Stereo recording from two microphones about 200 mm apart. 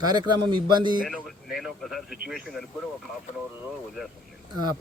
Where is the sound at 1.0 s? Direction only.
Centre (ahead or behind).